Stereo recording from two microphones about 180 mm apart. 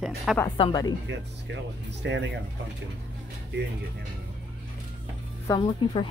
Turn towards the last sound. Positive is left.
turn(degrees=25)  # may be behind; listen again after turning